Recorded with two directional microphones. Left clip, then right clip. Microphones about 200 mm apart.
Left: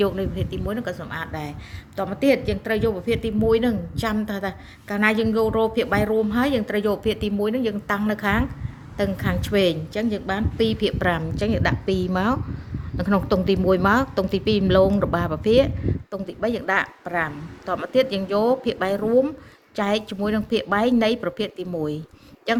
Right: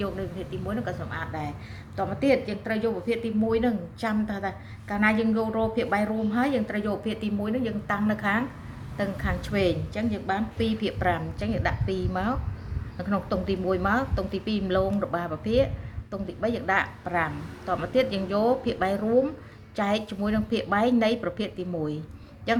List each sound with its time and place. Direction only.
0.0 s speech: 55° left (ahead or behind)